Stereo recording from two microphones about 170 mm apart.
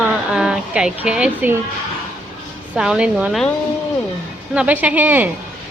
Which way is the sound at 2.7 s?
5° right (ahead or behind).